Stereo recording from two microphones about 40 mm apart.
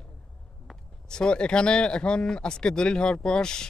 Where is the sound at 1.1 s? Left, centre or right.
Left.